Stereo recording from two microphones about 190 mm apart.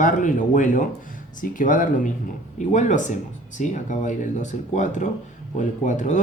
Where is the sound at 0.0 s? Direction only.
45° left (ahead or behind).